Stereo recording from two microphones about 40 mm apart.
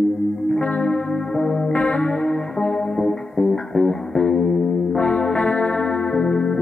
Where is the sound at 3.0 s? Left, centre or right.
Centre.